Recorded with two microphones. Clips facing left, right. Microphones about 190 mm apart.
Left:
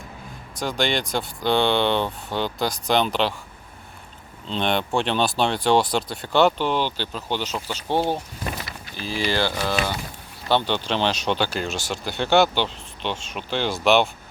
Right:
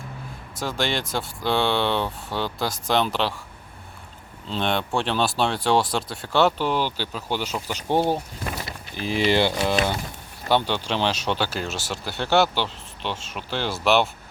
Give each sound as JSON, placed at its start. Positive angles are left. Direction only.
{"t": 0.6, "sound": "speech", "side_deg": 0}
{"t": 4.4, "sound": "speech", "side_deg": 0}
{"t": 10.5, "sound": "speech", "side_deg": -10}